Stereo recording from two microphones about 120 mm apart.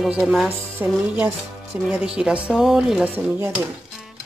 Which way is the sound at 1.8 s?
10° right (ahead or behind).